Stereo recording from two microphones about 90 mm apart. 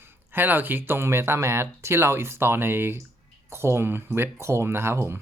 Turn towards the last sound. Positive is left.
turn(degrees=-30)  # may be behind; listen again after turning